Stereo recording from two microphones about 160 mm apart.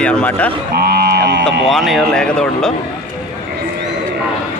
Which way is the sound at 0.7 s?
75° right (ahead or behind).